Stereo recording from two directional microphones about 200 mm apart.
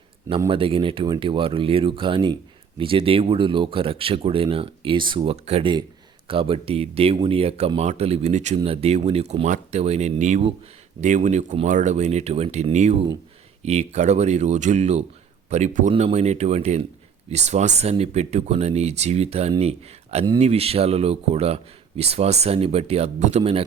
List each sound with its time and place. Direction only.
0.3 s speech: 20° right (ahead or behind)